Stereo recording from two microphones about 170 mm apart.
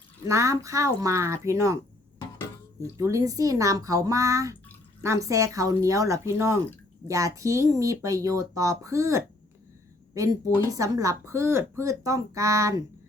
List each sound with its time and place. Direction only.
0.3 s speech: 15° right (ahead or behind)
3.0 s speech: 20° right (ahead or behind)
10.7 s speech: 20° right (ahead or behind)